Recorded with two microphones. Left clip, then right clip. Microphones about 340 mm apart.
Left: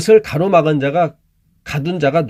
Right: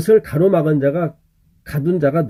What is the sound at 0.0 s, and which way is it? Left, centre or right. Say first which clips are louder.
Speech: left 2 dB; centre.